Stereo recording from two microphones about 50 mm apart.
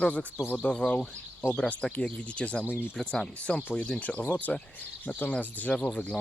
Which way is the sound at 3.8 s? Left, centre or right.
Left.